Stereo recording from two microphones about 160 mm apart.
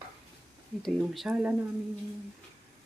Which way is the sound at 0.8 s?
Centre (ahead or behind).